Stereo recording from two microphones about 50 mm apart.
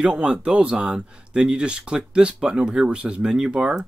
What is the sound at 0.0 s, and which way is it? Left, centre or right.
Speech, right.